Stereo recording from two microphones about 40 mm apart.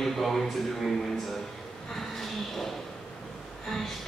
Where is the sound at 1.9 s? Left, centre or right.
Centre.